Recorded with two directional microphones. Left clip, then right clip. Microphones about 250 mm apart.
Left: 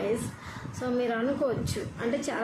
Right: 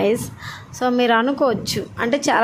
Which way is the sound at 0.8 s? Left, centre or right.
Right.